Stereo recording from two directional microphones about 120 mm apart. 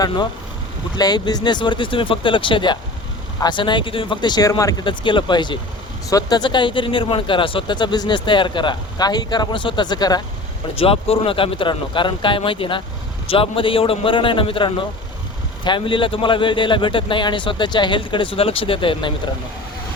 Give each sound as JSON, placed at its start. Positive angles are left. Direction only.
{"t": 0.9, "sound": "speech", "side_deg": 35}
{"t": 10.8, "sound": "a man's voice", "side_deg": 55}